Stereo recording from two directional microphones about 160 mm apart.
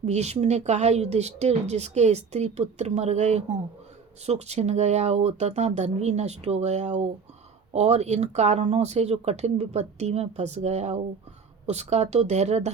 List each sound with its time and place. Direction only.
0.0 s speech: 45° right (ahead or behind)